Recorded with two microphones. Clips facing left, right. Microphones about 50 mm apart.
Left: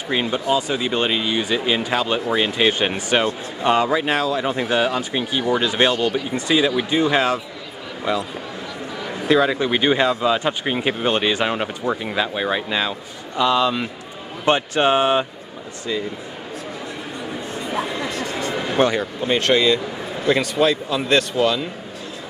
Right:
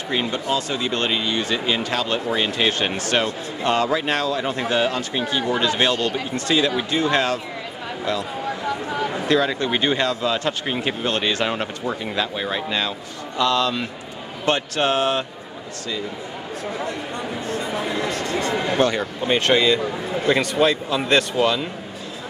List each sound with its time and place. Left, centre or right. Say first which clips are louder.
0.1 s speech: left 3 dB; centre
9.3 s speech: left 4 dB; centre
18.1 s a sound: right 1 dB; right
18.9 s speech: even; centre